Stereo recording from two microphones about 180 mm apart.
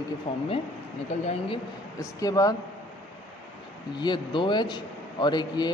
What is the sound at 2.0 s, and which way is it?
Speech, 20° left (ahead or behind).